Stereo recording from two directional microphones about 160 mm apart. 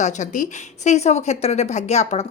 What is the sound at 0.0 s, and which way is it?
A woman's voice, 50° left (ahead or behind).